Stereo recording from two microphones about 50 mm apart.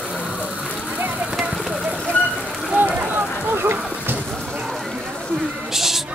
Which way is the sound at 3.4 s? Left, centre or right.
Right.